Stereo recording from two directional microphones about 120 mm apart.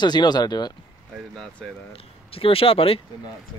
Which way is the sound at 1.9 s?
50° left (ahead or behind).